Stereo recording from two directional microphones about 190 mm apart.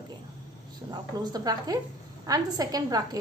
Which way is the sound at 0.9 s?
20° right (ahead or behind).